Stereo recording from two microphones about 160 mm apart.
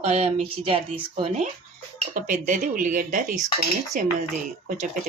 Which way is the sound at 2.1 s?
55° right (ahead or behind).